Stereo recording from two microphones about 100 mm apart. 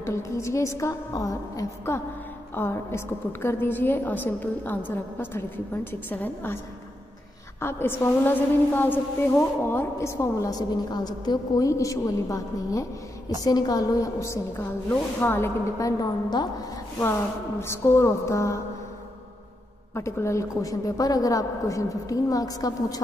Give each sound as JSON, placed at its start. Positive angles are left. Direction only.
{"t": 0.0, "sound": "a woman's voice", "side_deg": 30}
{"t": 7.6, "sound": "a woman's voice", "side_deg": 25}
{"t": 10.5, "sound": "a woman's voice", "side_deg": 45}
{"t": 15.8, "sound": "a woman's voice", "side_deg": 40}
{"t": 17.6, "sound": "a woman's voice", "side_deg": 25}
{"t": 19.9, "sound": "a woman's voice", "side_deg": 30}